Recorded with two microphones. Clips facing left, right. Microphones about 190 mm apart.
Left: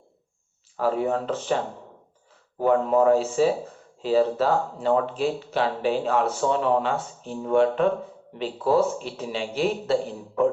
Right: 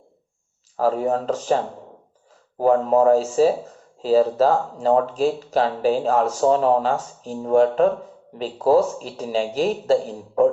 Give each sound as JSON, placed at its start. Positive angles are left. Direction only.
{"t": 0.8, "sound": "speech", "side_deg": -40}